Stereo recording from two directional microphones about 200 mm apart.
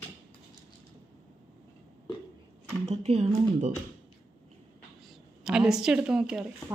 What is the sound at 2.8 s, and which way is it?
Speech, 30° right (ahead or behind).